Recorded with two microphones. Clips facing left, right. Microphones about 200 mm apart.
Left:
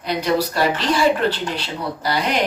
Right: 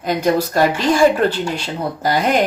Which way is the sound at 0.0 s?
45° right (ahead or behind).